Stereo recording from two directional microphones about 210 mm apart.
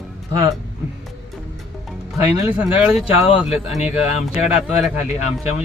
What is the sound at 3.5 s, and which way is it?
Speech, 30° left (ahead or behind).